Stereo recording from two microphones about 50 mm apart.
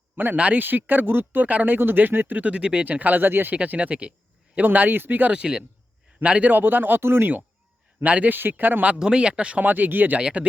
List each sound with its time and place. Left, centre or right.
0.3 s speech: right
0.6 s speech: right
2.8 s speech: right
3.5 s speech: right
5.3 s speech: centre
6.5 s speech: right
7.0 s speech: right
8.0 s speech: right
9.0 s speech: centre
9.6 s speech: right
10.2 s speech: centre